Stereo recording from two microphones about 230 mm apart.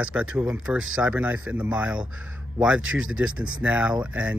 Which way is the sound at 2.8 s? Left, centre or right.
Right.